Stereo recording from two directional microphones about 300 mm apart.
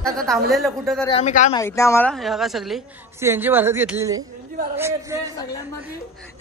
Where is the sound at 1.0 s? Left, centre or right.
Left.